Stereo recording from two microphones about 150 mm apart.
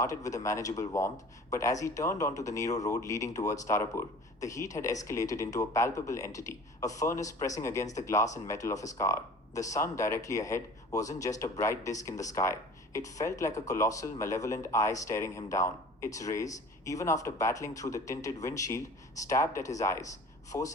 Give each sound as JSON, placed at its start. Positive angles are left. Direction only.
{"t": 0.0, "sound": "speech", "side_deg": 20}